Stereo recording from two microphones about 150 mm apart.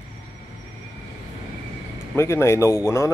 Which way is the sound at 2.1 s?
15° left (ahead or behind).